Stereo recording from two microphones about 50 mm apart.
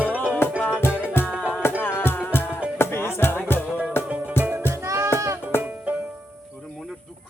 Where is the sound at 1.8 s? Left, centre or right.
Left.